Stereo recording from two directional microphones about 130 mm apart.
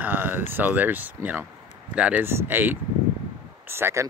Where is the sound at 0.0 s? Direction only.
15° right (ahead or behind).